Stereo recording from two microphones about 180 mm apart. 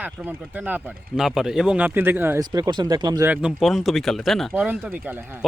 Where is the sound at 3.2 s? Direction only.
5° right (ahead or behind).